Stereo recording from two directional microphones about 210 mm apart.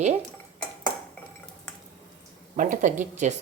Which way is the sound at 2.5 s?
35° right (ahead or behind).